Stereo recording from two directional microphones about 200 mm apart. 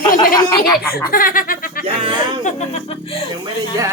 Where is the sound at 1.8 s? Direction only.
30° right (ahead or behind).